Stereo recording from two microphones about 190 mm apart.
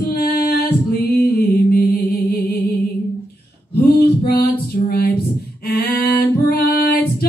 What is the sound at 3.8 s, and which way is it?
Male singing, 55° left (ahead or behind).